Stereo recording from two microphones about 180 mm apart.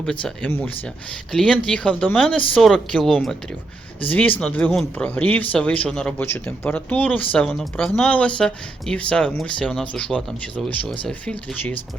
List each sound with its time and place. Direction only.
0.0 s speech: 5° left (ahead or behind)